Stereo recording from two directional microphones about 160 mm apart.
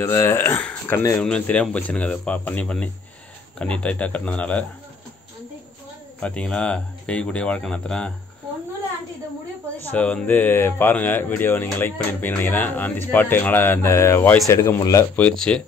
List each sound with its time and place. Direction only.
0.0 s speech: 15° left (ahead or behind)
6.2 s speech: 5° left (ahead or behind)
9.8 s speech: 10° left (ahead or behind)
15.1 s speech: 5° left (ahead or behind)